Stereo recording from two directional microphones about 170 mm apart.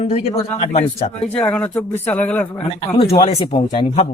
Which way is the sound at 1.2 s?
5° left (ahead or behind).